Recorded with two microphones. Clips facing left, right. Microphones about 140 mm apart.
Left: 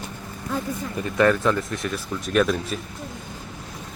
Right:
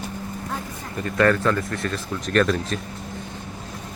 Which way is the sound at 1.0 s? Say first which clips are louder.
Even; 10° left (ahead or behind).